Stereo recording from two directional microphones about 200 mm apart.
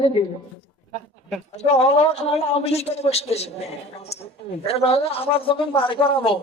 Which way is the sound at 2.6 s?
30° left (ahead or behind).